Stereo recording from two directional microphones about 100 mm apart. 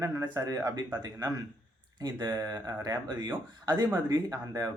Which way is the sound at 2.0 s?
40° right (ahead or behind).